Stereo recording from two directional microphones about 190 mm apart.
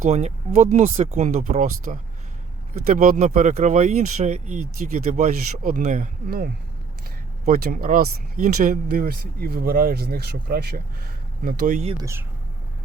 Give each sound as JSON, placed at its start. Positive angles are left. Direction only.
{"t": 0.0, "sound": "speech", "side_deg": -35}
{"t": 11.9, "sound": "speech", "side_deg": -15}